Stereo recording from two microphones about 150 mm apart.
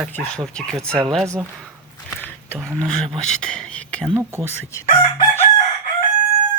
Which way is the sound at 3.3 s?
5° left (ahead or behind).